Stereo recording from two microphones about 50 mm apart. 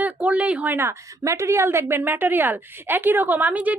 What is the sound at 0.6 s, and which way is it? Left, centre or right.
Speech, right.